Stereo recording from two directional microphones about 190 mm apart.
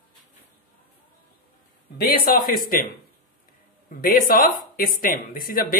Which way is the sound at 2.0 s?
50° left (ahead or behind).